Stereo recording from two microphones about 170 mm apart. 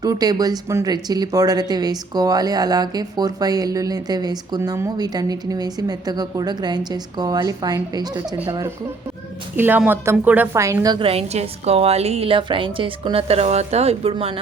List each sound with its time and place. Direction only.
0.0 s speech: 20° right (ahead or behind)
9.6 s a woman's voice: 10° right (ahead or behind); by 14.3 s 35° right (ahead or behind)